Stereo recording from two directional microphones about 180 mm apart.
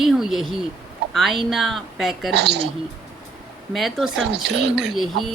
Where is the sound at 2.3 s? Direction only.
70° right (ahead or behind).